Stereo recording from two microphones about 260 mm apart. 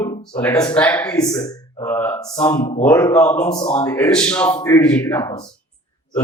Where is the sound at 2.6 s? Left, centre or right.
Left.